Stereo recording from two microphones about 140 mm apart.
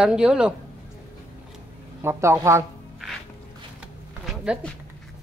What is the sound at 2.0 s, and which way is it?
Speech, 20° right (ahead or behind).